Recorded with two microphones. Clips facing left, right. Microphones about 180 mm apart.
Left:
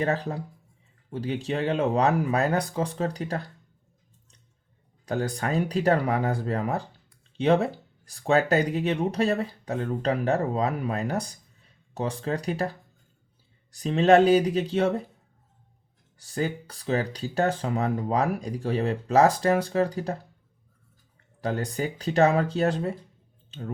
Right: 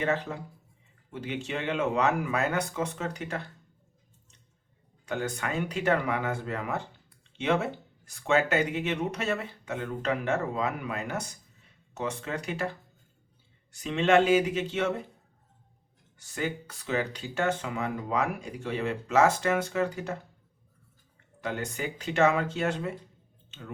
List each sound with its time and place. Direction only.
0.0 s speech: 35° left (ahead or behind)
5.0 s speech: 35° left (ahead or behind)
16.1 s speech: 35° left (ahead or behind)
21.4 s speech: 35° left (ahead or behind)